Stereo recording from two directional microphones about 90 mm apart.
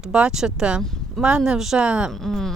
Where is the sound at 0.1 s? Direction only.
10° right (ahead or behind).